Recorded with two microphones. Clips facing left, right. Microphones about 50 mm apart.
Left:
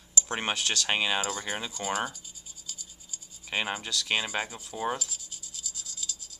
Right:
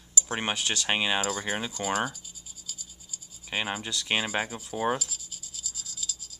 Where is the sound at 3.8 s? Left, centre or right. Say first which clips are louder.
Right 1 dB; centre.